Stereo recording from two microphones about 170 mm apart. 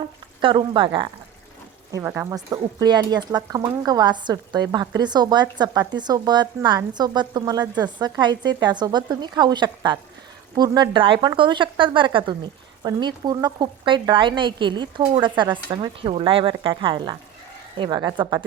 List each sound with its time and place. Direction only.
0.4 s speech: 30° right (ahead or behind)
1.9 s speech: 15° right (ahead or behind)